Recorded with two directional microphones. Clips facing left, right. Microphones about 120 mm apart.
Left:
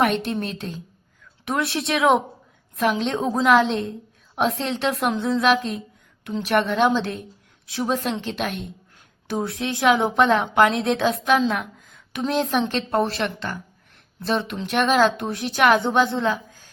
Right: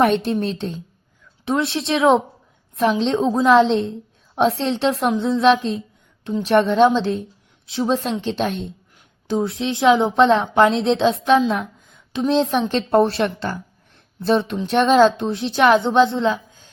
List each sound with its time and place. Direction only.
0.0 s a woman's voice: 30° right (ahead or behind)
11.6 s a sound: 25° right (ahead or behind)
12.3 s a woman's voice: 25° right (ahead or behind)
14.5 s a woman's voice: 20° right (ahead or behind)